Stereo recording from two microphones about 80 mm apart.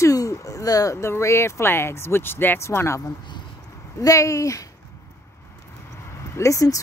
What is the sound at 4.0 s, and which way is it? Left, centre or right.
Speech, left.